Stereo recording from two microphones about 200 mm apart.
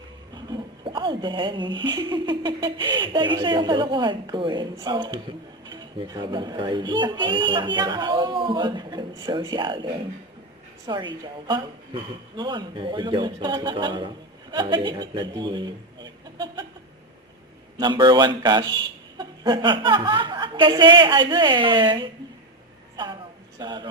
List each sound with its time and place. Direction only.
0.3 s a woman's voice: 25° right (ahead or behind)
17.7 s a woman's voice: 25° right (ahead or behind)
23.6 s a woman's voice: 25° right (ahead or behind)